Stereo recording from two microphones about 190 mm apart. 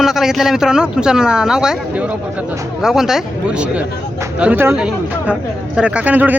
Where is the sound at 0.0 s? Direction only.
Centre (ahead or behind).